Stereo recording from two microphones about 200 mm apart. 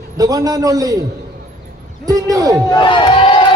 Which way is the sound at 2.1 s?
15° right (ahead or behind).